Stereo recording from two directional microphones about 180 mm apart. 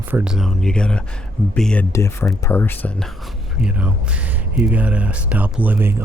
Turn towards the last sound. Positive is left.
turn(degrees=-10)  # may be behind; listen again after turning